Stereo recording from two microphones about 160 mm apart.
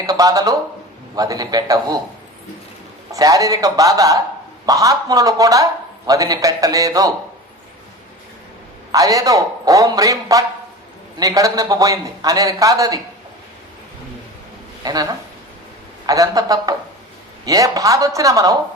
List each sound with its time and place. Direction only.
0.0 s a man's voice: 20° right (ahead or behind)
3.1 s a man's voice: 20° right (ahead or behind)
8.9 s a man's voice: 20° right (ahead or behind)
14.8 s a man's voice: 25° right (ahead or behind)